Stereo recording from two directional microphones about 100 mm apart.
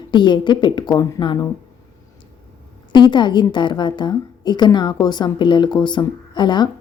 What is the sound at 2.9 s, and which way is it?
A woman's voice, 50° left (ahead or behind).